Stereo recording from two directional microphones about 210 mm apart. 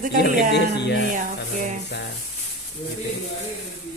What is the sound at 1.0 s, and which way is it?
Speech, 40° right (ahead or behind).